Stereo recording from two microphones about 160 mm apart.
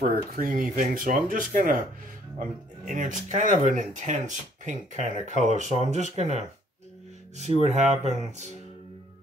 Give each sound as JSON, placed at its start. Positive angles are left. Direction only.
{"t": 0.0, "sound": "speech", "side_deg": -65}
{"t": 2.9, "sound": "speech", "side_deg": -50}
{"t": 7.6, "sound": "speech", "side_deg": -45}